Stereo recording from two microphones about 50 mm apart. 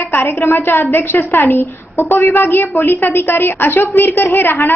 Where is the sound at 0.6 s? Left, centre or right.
Left.